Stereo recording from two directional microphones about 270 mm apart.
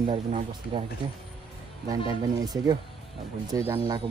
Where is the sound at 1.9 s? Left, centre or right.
Centre.